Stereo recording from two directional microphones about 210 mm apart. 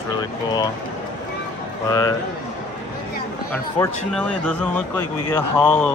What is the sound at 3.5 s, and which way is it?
A man's voice, 10° left (ahead or behind).